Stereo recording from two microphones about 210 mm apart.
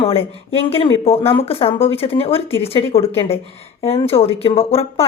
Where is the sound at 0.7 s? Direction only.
25° left (ahead or behind).